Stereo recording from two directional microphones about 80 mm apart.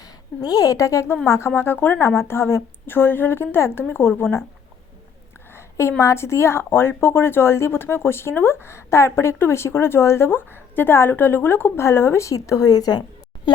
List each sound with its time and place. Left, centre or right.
0.0 s a woman's voice: left
5.5 s a sound: left
6.0 s a woman's voice: left